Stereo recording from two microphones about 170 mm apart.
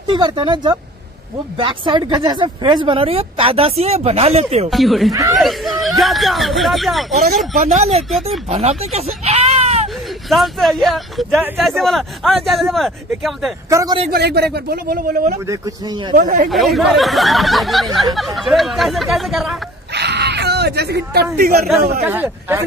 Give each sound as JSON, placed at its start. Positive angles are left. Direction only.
{"t": 0.1, "sound": "speech", "side_deg": -25}
{"t": 4.6, "sound": "speech", "side_deg": 0}
{"t": 7.5, "sound": "speech", "side_deg": -40}
{"t": 10.3, "sound": "speech", "side_deg": 0}
{"t": 13.7, "sound": "speech", "side_deg": -20}
{"t": 14.1, "sound": "speech", "side_deg": -70}
{"t": 15.4, "sound": "speech", "side_deg": -20}
{"t": 16.2, "sound": "speech", "side_deg": -55}
{"t": 16.4, "sound": "speech", "side_deg": 0}
{"t": 19.9, "sound": "a sound", "side_deg": -80}
{"t": 22.0, "sound": "a man's voice", "side_deg": -10}